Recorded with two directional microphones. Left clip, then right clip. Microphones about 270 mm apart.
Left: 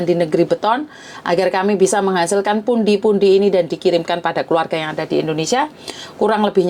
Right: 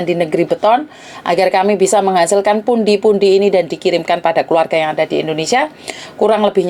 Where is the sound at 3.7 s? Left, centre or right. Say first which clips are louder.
Right 1 dB; left.